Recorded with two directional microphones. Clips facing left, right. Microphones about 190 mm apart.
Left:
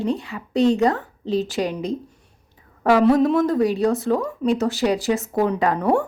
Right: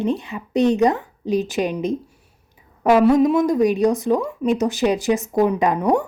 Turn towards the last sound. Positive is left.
turn(degrees=-15)  # may be behind; listen again after turning